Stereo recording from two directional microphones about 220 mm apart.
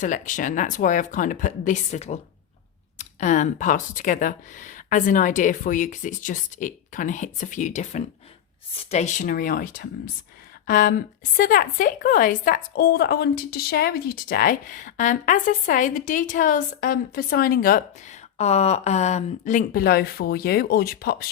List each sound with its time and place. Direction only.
0.0 s a woman's voice: 35° left (ahead or behind)